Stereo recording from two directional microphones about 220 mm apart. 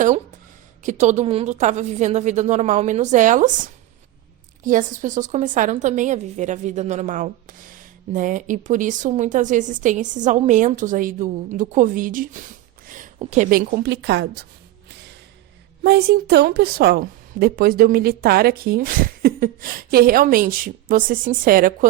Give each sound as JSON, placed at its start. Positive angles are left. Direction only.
{"t": 0.8, "sound": "a woman's voice", "side_deg": -35}
{"t": 14.8, "sound": "music", "side_deg": -50}
{"t": 15.8, "sound": "a woman's voice", "side_deg": -45}